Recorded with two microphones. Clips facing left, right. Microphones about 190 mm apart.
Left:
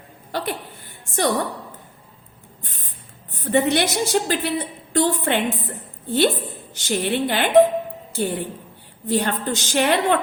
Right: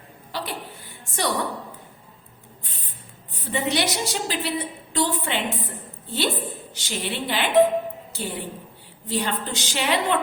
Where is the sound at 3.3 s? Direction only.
50° left (ahead or behind).